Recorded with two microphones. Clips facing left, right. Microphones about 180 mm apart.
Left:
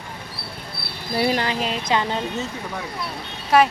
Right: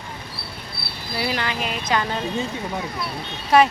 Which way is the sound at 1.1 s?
45° left (ahead or behind).